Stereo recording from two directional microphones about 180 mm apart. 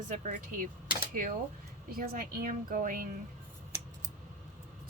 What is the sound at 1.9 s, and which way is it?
A woman's voice, 55° right (ahead or behind).